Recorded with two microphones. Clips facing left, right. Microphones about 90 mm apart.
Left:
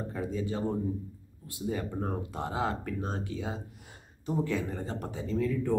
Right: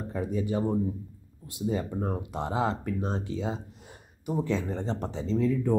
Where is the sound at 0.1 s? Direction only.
20° right (ahead or behind).